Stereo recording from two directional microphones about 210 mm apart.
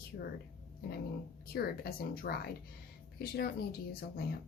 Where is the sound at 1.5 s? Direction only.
50° left (ahead or behind).